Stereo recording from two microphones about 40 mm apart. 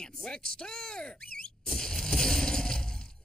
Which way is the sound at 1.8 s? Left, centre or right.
Centre.